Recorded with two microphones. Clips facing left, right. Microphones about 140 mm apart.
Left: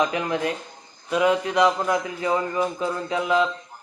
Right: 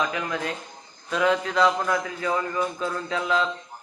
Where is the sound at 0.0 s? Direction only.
30° left (ahead or behind).